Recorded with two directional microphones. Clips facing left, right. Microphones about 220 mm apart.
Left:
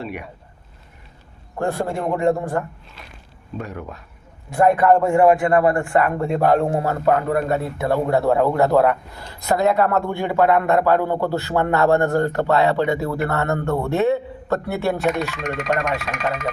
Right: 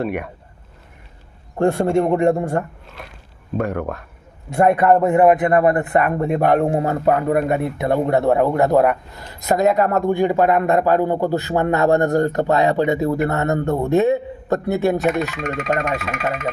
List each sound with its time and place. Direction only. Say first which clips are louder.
0.0 s speech: right 7 dB; 55° right (ahead or behind)
1.5 s a man's voice: right 7 dB; 25° right (ahead or behind)
3.6 s speech: right 9 dB; 55° right (ahead or behind)
4.5 s a man's voice: right 1 dB; 25° right (ahead or behind)
15.4 s speech: right 1 dB; 5° right (ahead or behind)